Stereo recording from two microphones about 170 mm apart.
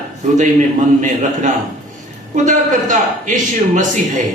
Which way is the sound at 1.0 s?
45° right (ahead or behind).